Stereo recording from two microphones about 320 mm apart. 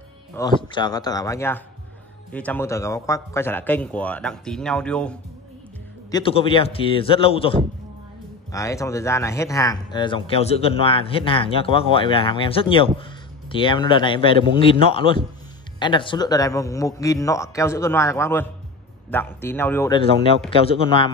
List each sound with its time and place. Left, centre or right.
0.3 s a man's voice: centre
6.1 s speech: centre